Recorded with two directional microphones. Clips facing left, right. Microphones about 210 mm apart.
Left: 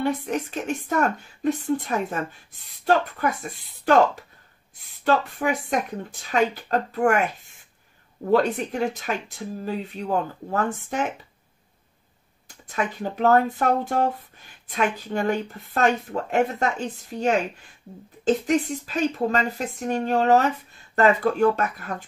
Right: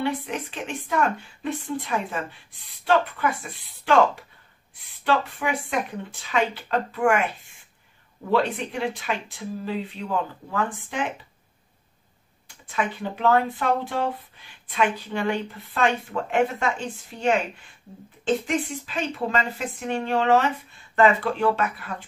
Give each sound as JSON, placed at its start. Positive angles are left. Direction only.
{"t": 0.0, "sound": "speech", "side_deg": 45}
{"t": 8.3, "sound": "speech", "side_deg": 45}
{"t": 12.4, "sound": "speech", "side_deg": 40}